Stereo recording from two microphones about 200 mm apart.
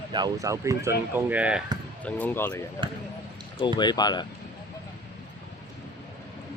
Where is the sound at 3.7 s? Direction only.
20° left (ahead or behind).